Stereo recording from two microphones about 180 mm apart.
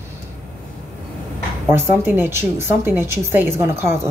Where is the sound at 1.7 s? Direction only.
10° right (ahead or behind).